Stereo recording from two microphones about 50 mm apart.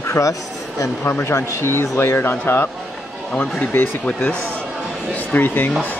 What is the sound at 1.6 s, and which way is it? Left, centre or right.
Speech, left.